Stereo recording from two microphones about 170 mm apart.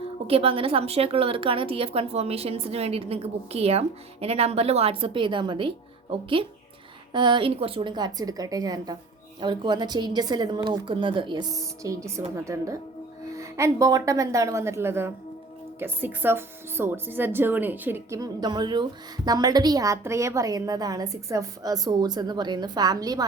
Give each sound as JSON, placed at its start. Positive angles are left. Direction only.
{"t": 0.3, "sound": "a woman's voice", "side_deg": -35}